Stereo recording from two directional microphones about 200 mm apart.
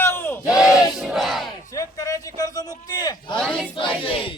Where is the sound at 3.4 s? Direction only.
5° left (ahead or behind).